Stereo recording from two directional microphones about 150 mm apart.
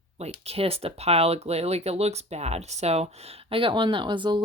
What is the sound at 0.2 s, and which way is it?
Speech, 40° right (ahead or behind).